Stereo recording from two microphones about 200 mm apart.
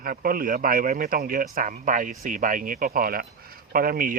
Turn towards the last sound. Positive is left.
turn(degrees=-45)  # may be behind; listen again after turning